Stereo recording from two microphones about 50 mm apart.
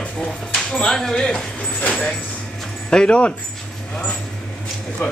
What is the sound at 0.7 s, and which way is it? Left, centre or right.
Speech, centre.